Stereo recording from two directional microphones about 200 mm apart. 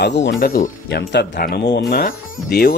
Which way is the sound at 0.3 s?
45° left (ahead or behind).